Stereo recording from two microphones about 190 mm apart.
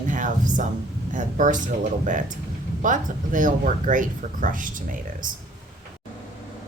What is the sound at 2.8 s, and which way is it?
Speech, 45° right (ahead or behind).